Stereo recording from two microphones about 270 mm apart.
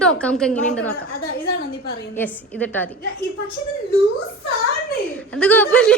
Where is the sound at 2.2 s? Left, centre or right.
Centre.